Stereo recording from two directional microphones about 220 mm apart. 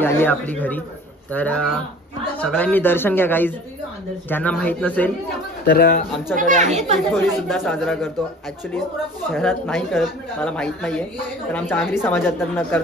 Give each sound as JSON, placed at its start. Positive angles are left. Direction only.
{"t": 0.0, "sound": "speech", "side_deg": 10}
{"t": 5.8, "sound": "speech", "side_deg": 45}
{"t": 6.3, "sound": "speech", "side_deg": -35}
{"t": 7.1, "sound": "a woman's voice", "side_deg": 0}
{"t": 9.3, "sound": "a woman's voice", "side_deg": 5}